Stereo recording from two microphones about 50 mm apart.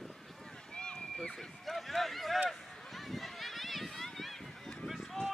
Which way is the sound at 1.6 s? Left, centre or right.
Centre.